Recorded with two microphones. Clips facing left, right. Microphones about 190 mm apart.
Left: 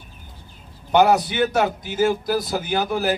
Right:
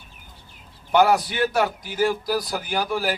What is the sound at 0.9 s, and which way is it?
A man's voice, 20° left (ahead or behind).